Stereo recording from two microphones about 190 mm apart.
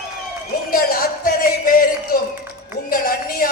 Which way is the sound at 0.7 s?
50° left (ahead or behind).